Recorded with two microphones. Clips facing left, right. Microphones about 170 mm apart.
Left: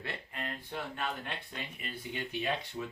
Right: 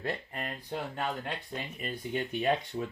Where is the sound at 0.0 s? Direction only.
40° right (ahead or behind).